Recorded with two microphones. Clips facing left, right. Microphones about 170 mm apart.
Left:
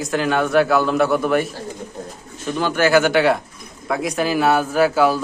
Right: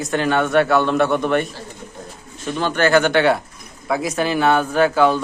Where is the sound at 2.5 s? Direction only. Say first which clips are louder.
Even; 10° left (ahead or behind).